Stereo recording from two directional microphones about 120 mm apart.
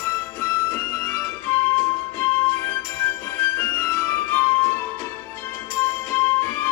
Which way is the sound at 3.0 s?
20° left (ahead or behind).